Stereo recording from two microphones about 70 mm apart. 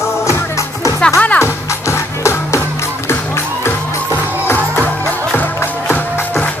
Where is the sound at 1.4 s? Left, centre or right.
Left.